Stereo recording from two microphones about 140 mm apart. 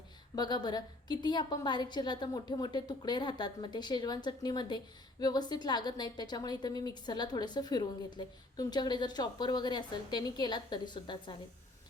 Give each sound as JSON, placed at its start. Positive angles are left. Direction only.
{"t": 0.3, "sound": "a woman's voice", "side_deg": 30}